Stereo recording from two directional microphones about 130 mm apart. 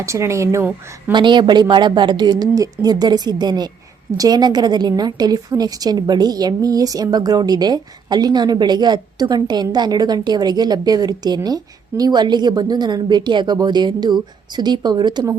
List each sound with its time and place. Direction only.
0.0 s speech: 20° right (ahead or behind)
1.1 s a woman's voice: 35° right (ahead or behind)